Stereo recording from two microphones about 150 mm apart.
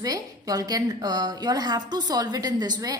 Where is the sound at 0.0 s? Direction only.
25° right (ahead or behind).